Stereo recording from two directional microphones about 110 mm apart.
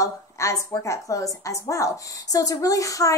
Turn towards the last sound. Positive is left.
turn(degrees=30)  # may be behind; listen again after turning